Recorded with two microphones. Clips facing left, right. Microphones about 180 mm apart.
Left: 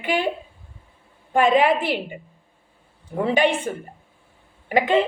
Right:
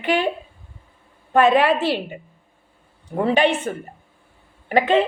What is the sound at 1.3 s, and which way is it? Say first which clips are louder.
Speech: right 1 dB; 15° left (ahead or behind).